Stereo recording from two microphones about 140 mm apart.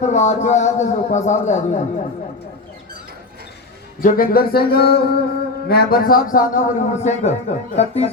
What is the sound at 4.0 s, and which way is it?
A man's voice, 90° left.